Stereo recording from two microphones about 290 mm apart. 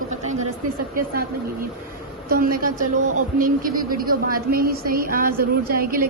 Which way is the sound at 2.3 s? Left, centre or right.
Right.